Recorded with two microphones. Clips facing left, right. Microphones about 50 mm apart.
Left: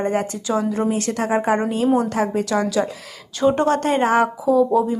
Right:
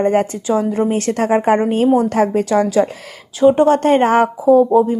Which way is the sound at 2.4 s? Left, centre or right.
Right.